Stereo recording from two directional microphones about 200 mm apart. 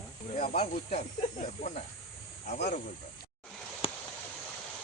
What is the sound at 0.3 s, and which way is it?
Speech, 35° left (ahead or behind).